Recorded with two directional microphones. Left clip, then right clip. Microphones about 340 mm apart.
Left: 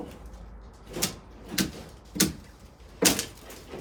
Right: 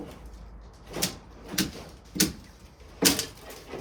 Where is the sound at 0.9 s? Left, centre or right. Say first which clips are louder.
Even; centre.